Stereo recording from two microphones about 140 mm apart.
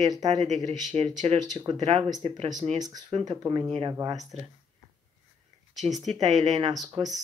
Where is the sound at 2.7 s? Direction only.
30° right (ahead or behind).